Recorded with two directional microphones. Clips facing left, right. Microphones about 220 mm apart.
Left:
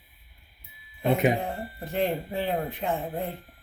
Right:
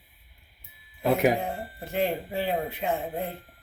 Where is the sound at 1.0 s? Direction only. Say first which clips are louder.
Right 1 dB; centre (ahead or behind).